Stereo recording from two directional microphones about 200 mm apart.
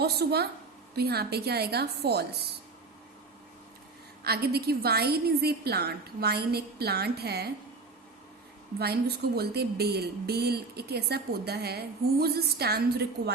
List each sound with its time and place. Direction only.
0.0 s speech: 55° right (ahead or behind)
4.2 s speech: 50° right (ahead or behind)
8.8 s speech: 55° right (ahead or behind)